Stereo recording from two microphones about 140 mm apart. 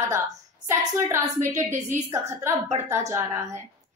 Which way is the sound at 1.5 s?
20° right (ahead or behind).